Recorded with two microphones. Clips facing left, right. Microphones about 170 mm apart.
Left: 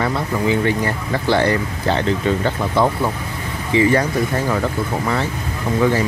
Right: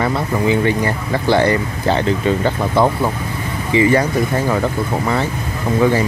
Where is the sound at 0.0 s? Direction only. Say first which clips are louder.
Right 2 dB; 15° right (ahead or behind).